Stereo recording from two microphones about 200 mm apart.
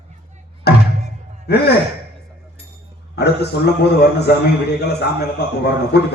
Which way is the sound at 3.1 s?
55° left (ahead or behind).